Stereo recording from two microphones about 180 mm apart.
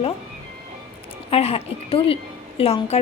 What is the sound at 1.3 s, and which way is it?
A woman's voice, 35° left (ahead or behind).